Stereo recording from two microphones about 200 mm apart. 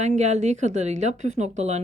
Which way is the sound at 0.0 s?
35° right (ahead or behind).